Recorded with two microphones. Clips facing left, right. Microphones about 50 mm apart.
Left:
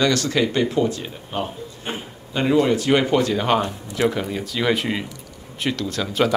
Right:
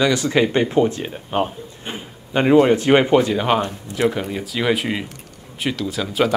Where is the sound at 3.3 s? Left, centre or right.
Centre.